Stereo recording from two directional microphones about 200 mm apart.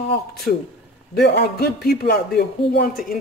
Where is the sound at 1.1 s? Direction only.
55° left (ahead or behind).